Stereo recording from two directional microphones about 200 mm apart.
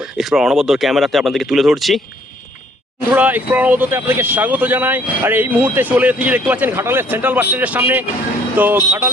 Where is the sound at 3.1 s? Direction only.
10° right (ahead or behind).